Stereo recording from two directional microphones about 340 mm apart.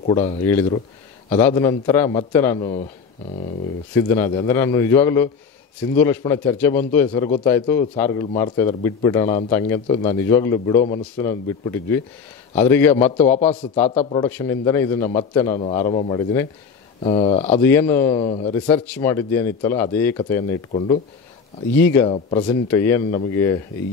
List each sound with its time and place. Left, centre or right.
0.1 s speech: centre
3.9 s speech: centre
13.4 s speech: centre
17.6 s speech: centre
18.7 s speech: centre